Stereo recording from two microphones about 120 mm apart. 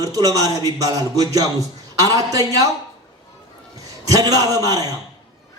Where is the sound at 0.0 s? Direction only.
30° right (ahead or behind).